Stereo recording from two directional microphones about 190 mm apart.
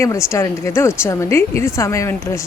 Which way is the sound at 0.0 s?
15° left (ahead or behind).